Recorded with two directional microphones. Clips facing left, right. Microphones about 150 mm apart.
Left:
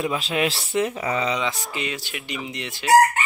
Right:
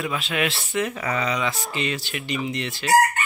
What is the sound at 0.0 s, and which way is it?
Speech, 30° left (ahead or behind).